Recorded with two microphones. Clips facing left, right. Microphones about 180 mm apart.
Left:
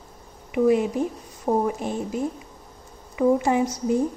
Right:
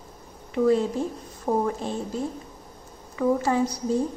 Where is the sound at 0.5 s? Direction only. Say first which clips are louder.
Left 2 dB; 15° left (ahead or behind).